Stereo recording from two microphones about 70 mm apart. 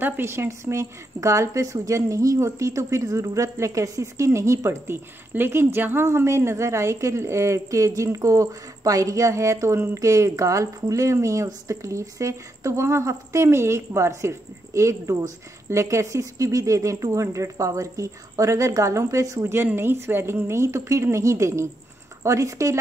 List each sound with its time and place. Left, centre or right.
0.0 s a woman's voice: right
19.5 s a woman's voice: right